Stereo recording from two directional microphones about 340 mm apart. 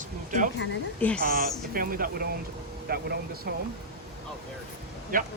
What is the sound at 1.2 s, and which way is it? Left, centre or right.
Speech, right.